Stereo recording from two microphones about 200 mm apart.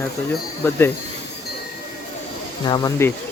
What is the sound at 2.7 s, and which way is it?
Speech, 15° left (ahead or behind).